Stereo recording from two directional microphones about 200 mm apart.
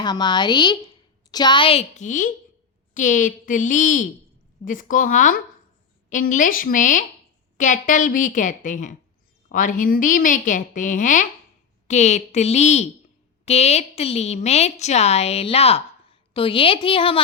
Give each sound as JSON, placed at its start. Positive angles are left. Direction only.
{"t": 0.0, "sound": "a woman's voice", "side_deg": 20}